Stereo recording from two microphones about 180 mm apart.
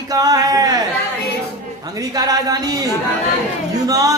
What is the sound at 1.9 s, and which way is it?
A woman's voice, 20° right (ahead or behind).